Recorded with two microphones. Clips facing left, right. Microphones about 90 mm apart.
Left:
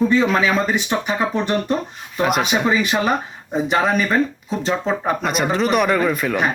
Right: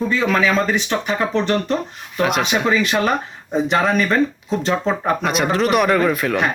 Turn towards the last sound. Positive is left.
turn(degrees=5)  # may be behind; listen again after turning